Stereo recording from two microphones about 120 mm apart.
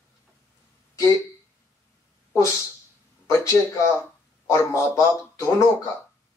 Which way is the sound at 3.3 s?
25° left (ahead or behind).